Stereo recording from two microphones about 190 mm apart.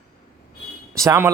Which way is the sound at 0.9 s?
15° right (ahead or behind).